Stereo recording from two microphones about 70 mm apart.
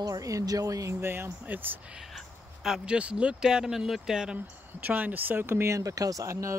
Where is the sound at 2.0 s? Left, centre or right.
Centre.